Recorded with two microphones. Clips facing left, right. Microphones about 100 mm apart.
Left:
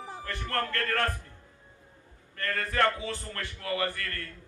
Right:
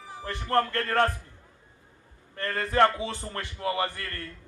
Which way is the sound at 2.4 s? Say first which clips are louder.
Right 5 dB; 20° right (ahead or behind).